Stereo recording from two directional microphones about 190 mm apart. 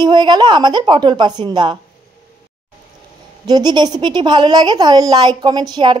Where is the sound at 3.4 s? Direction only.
20° right (ahead or behind).